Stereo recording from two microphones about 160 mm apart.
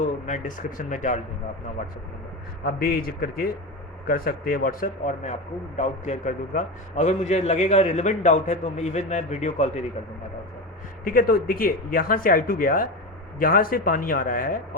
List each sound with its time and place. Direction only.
0.0 s a man's voice: 50° left (ahead or behind)
2.6 s a man's voice: 70° left (ahead or behind); by 9.8 s 45° left (ahead or behind)
11.0 s speech: 65° left (ahead or behind)